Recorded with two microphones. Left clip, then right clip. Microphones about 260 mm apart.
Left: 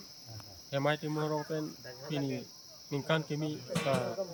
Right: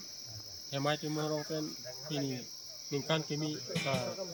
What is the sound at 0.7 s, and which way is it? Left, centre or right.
Cricket, centre.